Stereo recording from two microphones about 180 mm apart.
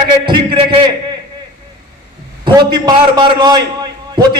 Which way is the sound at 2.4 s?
25° right (ahead or behind).